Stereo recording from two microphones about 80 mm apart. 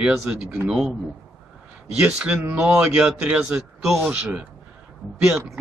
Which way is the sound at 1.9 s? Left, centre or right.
Centre.